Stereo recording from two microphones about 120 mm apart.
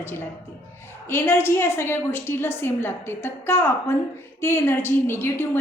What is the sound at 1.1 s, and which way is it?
A woman's voice, 20° left (ahead or behind).